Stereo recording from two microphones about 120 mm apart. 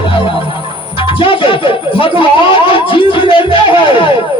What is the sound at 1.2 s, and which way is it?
Music, 45° left (ahead or behind).